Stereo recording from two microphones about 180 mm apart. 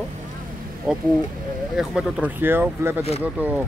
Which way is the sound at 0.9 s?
5° right (ahead or behind).